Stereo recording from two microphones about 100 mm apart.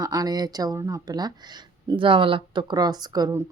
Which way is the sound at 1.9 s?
55° right (ahead or behind).